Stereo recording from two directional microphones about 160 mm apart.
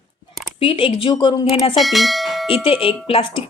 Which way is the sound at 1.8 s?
Centre (ahead or behind).